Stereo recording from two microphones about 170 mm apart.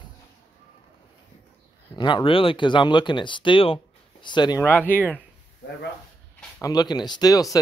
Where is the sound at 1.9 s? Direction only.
30° left (ahead or behind).